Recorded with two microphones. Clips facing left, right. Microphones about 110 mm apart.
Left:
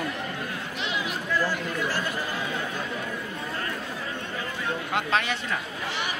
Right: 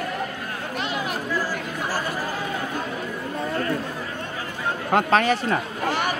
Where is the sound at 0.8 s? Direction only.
50° right (ahead or behind).